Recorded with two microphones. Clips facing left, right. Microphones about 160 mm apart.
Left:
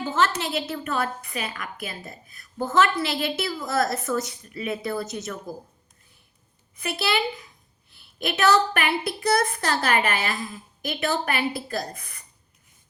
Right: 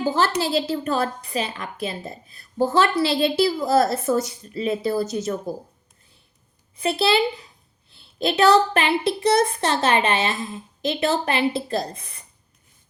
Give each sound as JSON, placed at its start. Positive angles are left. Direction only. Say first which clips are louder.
{"t": 0.0, "sound": "a woman's voice", "louder": "right 3 dB", "side_deg": -35}
{"t": 6.7, "sound": "a woman's voice", "louder": "right 6 dB", "side_deg": -30}